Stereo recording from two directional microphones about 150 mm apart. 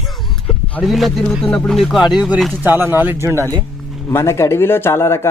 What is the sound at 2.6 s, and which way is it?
Speech, 15° right (ahead or behind).